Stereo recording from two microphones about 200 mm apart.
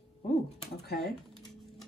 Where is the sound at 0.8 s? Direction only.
50° left (ahead or behind).